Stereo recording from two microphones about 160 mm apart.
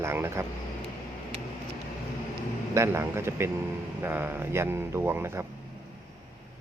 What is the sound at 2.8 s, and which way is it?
Speech, 15° right (ahead or behind).